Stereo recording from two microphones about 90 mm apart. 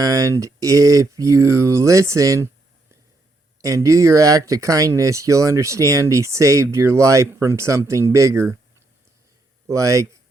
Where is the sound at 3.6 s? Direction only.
40° right (ahead or behind).